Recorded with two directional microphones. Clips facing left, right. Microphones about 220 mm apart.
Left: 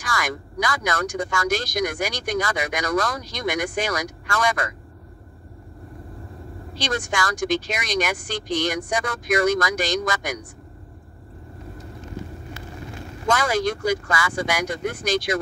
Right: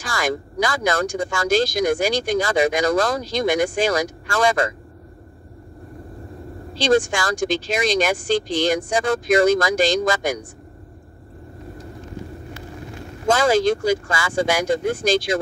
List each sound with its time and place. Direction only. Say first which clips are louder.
0.0 s speech: right 4 dB; 30° right (ahead or behind)
6.7 s speech: right 9 dB; 30° right (ahead or behind)
13.3 s speech: right 5 dB; 25° right (ahead or behind)